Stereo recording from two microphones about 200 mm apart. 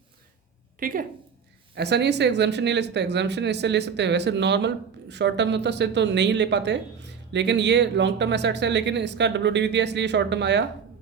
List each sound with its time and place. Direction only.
0.8 s a woman's voice: 45° right (ahead or behind)
1.7 s speech: 55° right (ahead or behind)